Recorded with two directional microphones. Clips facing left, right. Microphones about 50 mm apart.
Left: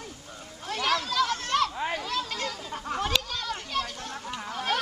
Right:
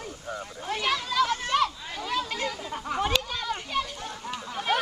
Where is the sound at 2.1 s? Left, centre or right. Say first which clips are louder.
Right 2 dB; centre.